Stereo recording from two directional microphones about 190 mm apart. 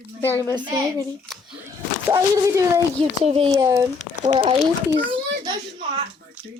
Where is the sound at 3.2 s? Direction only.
30° right (ahead or behind).